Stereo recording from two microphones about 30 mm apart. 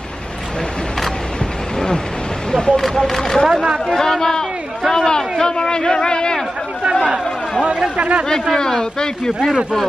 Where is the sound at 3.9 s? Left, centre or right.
Centre.